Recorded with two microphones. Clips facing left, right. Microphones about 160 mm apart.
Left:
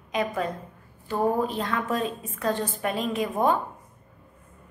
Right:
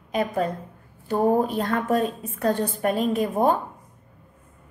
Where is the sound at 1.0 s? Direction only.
45° right (ahead or behind).